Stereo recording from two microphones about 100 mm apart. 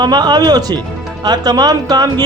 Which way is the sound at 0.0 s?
45° right (ahead or behind).